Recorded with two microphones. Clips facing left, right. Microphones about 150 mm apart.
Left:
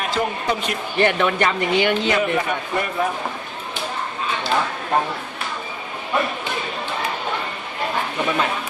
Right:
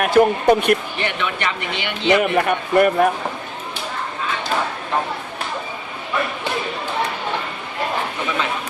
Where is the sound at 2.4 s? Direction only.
60° right (ahead or behind).